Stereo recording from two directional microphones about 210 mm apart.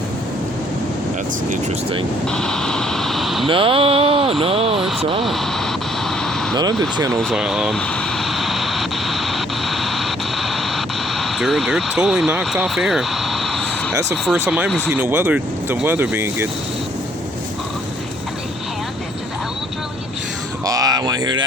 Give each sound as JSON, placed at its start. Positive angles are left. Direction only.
{"t": 1.5, "sound": "speech", "side_deg": -25}
{"t": 2.2, "sound": "a sound", "side_deg": 5}
{"t": 3.4, "sound": "speech", "side_deg": -25}
{"t": 5.2, "sound": "speech", "side_deg": 0}
{"t": 6.1, "sound": "a sound", "side_deg": 0}
{"t": 7.1, "sound": "vehicle", "side_deg": 5}
{"t": 14.1, "sound": "speech", "side_deg": -10}
{"t": 20.7, "sound": "speech", "side_deg": -15}